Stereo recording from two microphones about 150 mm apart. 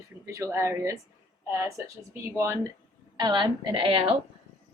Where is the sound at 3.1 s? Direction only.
30° right (ahead or behind).